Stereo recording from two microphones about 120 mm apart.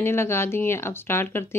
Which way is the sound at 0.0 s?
20° left (ahead or behind).